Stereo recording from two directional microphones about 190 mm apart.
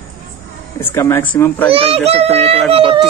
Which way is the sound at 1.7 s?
30° right (ahead or behind).